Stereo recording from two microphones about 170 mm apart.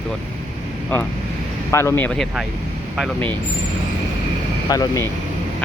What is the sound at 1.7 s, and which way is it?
Speech, 15° left (ahead or behind).